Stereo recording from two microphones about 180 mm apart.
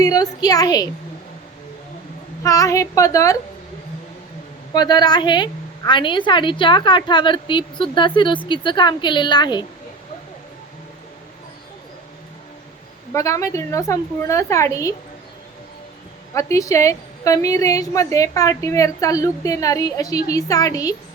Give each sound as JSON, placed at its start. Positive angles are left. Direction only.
{"t": 0.0, "sound": "a woman's voice", "side_deg": 20}
{"t": 2.4, "sound": "a woman's voice", "side_deg": 20}
{"t": 4.7, "sound": "a woman's voice", "side_deg": 25}
{"t": 13.1, "sound": "a woman's voice", "side_deg": 15}
{"t": 16.3, "sound": "a woman's voice", "side_deg": 15}